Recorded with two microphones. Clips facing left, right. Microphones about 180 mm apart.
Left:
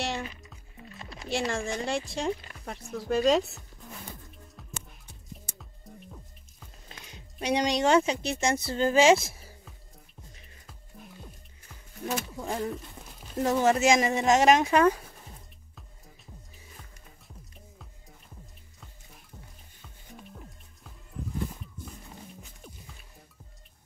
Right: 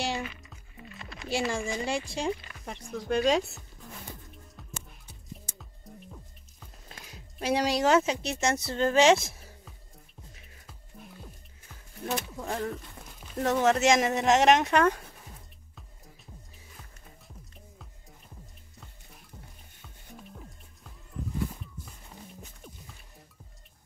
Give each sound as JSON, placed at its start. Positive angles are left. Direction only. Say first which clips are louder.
{"t": 0.9, "sound": "a sound", "louder": "even", "side_deg": 35}
{"t": 1.3, "sound": "speech", "louder": "even", "side_deg": 0}
{"t": 4.6, "sound": "music", "louder": "left 1 dB", "side_deg": 0}
{"t": 11.7, "sound": "speech", "louder": "even", "side_deg": 0}
{"t": 19.8, "sound": "music", "louder": "even", "side_deg": 0}